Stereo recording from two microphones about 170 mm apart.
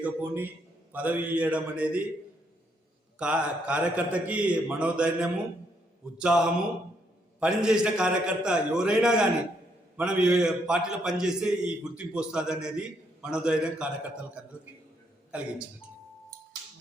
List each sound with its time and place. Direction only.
0.0 s a man's voice: 10° right (ahead or behind)
3.2 s a man's voice: 5° right (ahead or behind)